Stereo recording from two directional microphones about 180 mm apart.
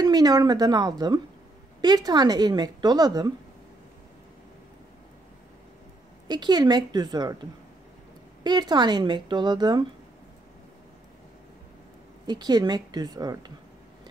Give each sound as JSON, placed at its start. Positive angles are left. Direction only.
{"t": 0.0, "sound": "speech", "side_deg": -20}
{"t": 6.2, "sound": "speech", "side_deg": -25}
{"t": 8.5, "sound": "speech", "side_deg": -25}
{"t": 12.3, "sound": "speech", "side_deg": -25}